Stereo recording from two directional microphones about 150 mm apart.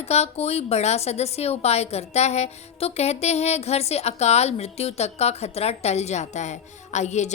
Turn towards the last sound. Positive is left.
turn(degrees=50)  # may be behind; listen again after turning